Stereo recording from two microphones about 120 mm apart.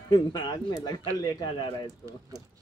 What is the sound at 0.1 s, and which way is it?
Speech, 35° left (ahead or behind).